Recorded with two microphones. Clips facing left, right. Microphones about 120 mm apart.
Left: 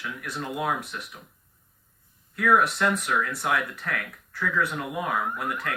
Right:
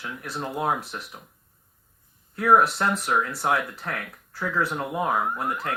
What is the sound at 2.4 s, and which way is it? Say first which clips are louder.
Speech: right 2 dB; 30° right (ahead or behind).